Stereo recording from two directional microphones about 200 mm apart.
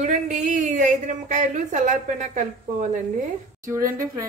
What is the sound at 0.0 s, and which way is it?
A woman's voice, 35° right (ahead or behind).